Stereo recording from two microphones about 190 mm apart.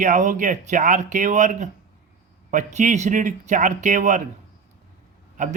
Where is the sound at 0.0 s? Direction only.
40° right (ahead or behind).